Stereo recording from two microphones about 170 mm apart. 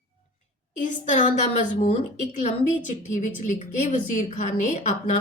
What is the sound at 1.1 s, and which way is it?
A woman's voice, 50° left (ahead or behind).